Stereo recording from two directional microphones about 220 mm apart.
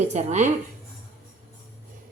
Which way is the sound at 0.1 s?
30° right (ahead or behind).